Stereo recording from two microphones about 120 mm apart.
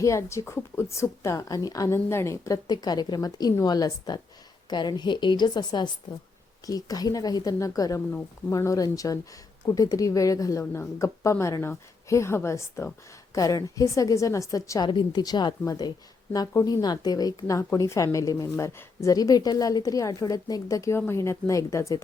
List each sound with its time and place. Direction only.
0.0 s a woman's voice: 25° left (ahead or behind)
14.8 s a woman's voice: 40° left (ahead or behind)